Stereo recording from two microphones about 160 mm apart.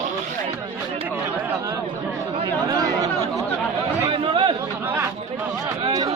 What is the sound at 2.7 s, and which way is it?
Chatter, 25° right (ahead or behind).